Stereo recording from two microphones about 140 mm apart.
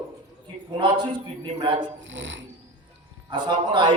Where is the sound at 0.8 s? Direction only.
35° right (ahead or behind).